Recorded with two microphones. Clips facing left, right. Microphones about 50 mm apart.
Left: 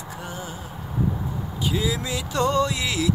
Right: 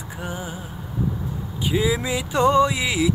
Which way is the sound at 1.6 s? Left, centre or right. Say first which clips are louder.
Right 4 dB; centre.